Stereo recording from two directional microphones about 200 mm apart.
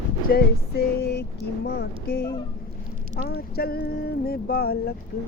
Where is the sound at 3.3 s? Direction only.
50° left (ahead or behind).